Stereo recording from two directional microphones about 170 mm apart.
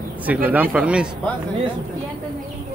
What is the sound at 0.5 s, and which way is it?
Speech, 10° right (ahead or behind).